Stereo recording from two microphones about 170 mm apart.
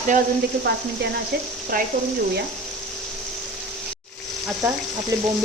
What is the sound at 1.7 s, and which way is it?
Speech, 55° right (ahead or behind).